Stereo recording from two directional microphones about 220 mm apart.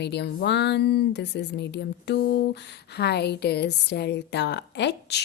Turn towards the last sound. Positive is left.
turn(degrees=50)  # may be behind; listen again after turning